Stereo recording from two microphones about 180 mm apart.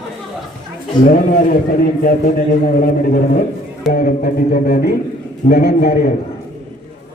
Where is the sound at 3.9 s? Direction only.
55° left (ahead or behind).